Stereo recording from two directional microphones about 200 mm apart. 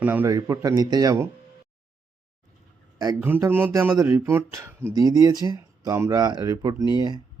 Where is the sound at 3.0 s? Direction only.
15° right (ahead or behind).